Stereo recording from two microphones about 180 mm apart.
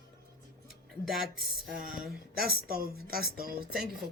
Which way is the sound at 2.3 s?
55° right (ahead or behind).